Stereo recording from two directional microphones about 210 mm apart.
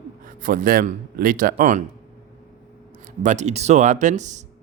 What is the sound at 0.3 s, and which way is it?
Speech, 40° right (ahead or behind).